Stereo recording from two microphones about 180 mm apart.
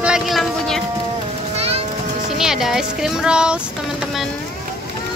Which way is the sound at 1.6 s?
35° right (ahead or behind).